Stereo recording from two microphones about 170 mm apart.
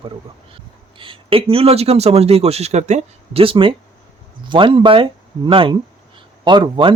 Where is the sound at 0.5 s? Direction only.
30° right (ahead or behind).